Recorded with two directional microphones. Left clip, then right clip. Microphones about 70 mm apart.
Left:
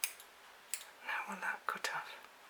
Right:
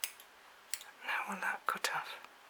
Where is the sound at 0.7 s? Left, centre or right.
Right.